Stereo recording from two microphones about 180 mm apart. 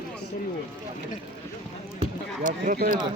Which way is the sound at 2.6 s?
50° right (ahead or behind).